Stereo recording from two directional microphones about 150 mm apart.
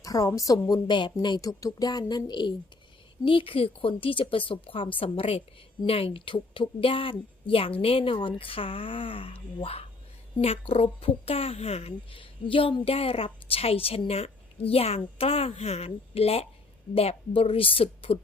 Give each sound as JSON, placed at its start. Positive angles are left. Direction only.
{"t": 0.0, "sound": "a woman's voice", "side_deg": 20}